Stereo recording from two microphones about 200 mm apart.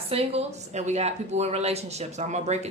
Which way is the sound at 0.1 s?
30° right (ahead or behind).